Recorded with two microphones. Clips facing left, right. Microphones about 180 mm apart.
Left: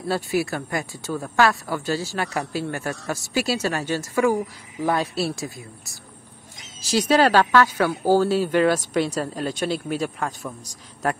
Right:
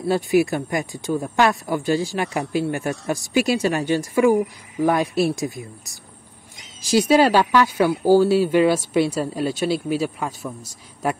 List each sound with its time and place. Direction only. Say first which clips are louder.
0.1 s speech: right 5 dB; 15° right (ahead or behind)